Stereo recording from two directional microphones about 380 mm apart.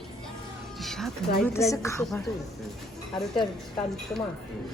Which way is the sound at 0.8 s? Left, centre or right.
Centre.